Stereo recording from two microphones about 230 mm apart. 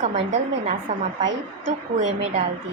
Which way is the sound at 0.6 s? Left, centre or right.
Right.